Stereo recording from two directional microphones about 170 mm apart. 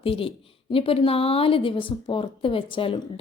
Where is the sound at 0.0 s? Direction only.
30° left (ahead or behind).